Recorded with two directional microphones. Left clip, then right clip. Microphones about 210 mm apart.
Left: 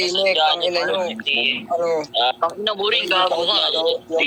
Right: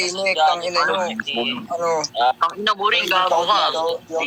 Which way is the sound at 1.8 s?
45° left (ahead or behind).